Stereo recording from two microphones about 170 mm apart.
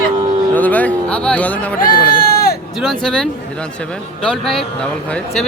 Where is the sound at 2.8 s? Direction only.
Centre (ahead or behind).